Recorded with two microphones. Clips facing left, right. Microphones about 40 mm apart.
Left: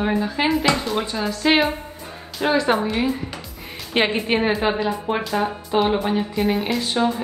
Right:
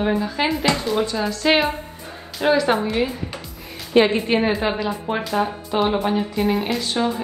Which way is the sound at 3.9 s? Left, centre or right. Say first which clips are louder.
Right 5 dB; left.